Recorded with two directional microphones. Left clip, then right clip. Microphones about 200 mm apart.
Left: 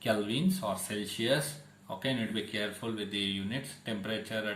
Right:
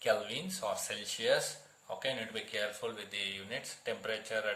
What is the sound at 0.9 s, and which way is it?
Speech, 30° right (ahead or behind).